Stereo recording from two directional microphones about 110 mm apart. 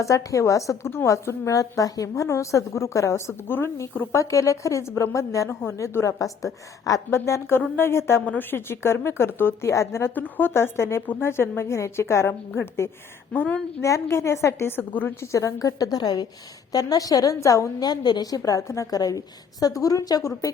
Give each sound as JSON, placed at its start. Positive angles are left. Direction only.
{"t": 0.0, "sound": "a woman's voice", "side_deg": 30}
{"t": 13.8, "sound": "a woman's voice", "side_deg": 25}